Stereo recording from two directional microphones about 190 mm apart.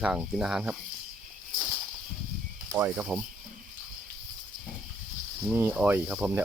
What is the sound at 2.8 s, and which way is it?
Speech, 10° right (ahead or behind).